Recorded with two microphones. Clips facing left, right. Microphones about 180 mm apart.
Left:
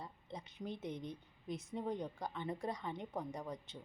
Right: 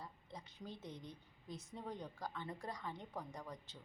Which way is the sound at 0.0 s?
25° left (ahead or behind).